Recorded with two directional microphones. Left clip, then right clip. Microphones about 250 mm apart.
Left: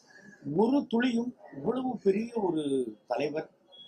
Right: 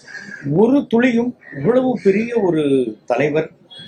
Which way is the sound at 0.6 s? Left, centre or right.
Left.